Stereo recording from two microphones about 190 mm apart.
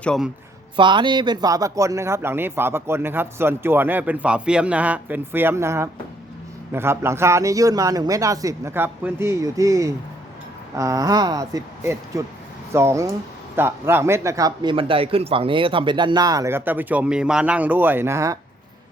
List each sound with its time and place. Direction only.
0.0 s speech: 5° left (ahead or behind)
0.8 s speech: 25° right (ahead or behind)